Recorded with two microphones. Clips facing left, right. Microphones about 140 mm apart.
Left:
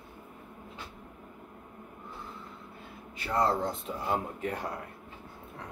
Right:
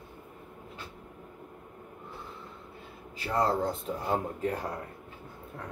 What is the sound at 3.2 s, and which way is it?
Speech, 35° right (ahead or behind).